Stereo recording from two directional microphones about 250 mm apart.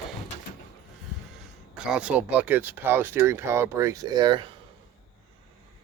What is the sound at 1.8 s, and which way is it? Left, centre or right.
Speech, centre.